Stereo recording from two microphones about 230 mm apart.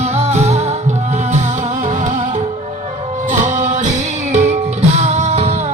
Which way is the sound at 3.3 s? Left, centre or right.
Right.